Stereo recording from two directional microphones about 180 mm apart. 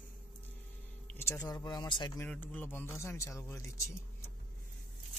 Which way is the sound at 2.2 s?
10° left (ahead or behind).